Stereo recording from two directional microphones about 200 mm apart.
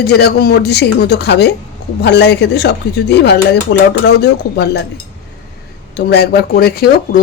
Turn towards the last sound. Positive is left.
turn(degrees=50)  # may be behind; listen again after turning